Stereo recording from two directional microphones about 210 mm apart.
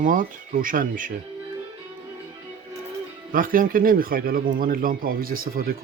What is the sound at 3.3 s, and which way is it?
Speech, 40° right (ahead or behind).